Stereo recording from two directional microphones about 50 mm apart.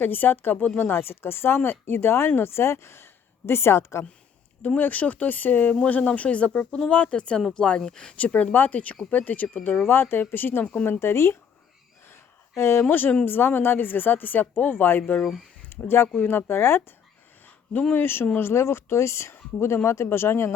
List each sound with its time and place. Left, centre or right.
0.0 s speech: left
4.8 s speech: left
5.8 s speech: left
8.2 s speech: left
9.8 s speech: left
10.8 s speech: left
12.5 s speech: left
12.9 s speech: left
17.9 s speech: left